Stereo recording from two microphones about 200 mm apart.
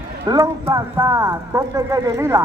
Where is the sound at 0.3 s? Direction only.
15° right (ahead or behind).